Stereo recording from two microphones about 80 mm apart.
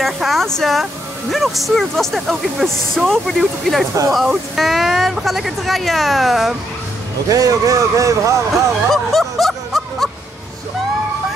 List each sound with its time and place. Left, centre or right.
0.0 s a sound: centre
0.6 s speech: centre
7.2 s speech: right
8.9 s snicker: centre